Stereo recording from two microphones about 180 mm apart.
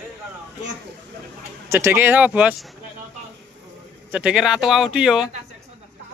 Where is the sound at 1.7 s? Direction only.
15° right (ahead or behind).